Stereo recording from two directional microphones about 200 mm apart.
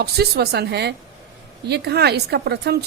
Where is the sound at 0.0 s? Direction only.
55° right (ahead or behind).